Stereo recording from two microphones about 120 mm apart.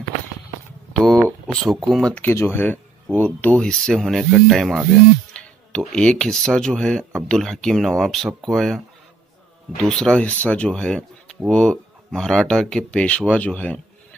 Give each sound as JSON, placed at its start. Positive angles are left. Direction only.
{"t": 0.9, "sound": "a sound", "side_deg": 5}
{"t": 1.5, "sound": "speech", "side_deg": 0}
{"t": 5.4, "sound": "music", "side_deg": 5}
{"t": 5.9, "sound": "speech", "side_deg": 5}